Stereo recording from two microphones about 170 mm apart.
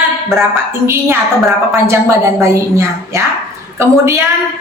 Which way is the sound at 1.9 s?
15° right (ahead or behind).